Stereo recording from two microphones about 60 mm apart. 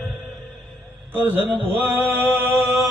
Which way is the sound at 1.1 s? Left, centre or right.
Right.